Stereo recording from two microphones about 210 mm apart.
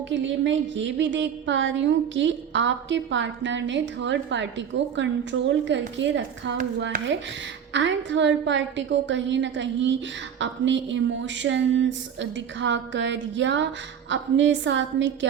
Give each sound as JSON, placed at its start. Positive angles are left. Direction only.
{"t": 0.1, "sound": "a woman's voice", "side_deg": -60}
{"t": 7.7, "sound": "a woman's voice", "side_deg": -60}